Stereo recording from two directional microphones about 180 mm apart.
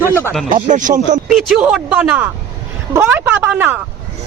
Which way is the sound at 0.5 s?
45° right (ahead or behind).